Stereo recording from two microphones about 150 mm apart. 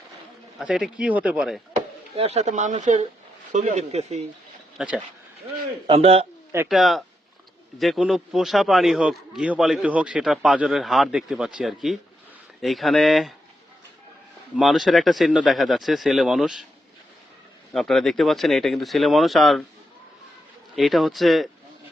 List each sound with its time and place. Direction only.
0.6 s speech: 5° right (ahead or behind)
2.1 s speech: 45° right (ahead or behind)
4.8 s a man's voice: 5° right (ahead or behind)
5.9 s speech: 40° right (ahead or behind)
6.7 s a man's voice: centre (ahead or behind)
14.5 s a man's voice: centre (ahead or behind)
17.7 s a man's voice: centre (ahead or behind)
20.7 s a man's voice: centre (ahead or behind)